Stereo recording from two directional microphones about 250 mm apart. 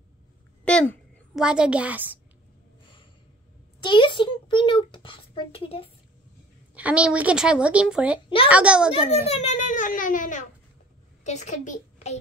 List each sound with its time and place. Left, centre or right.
0.7 s a child's voice: centre
3.8 s a child's voice: centre
6.7 s a woman's voice: centre
9.1 s a child's voice: left